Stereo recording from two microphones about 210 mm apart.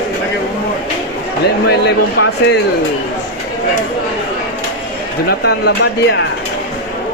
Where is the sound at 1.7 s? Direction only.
50° left (ahead or behind).